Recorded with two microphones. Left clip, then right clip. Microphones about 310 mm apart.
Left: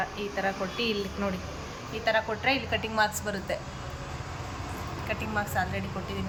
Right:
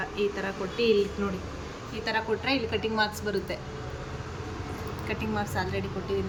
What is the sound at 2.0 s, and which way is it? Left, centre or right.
Speech, centre.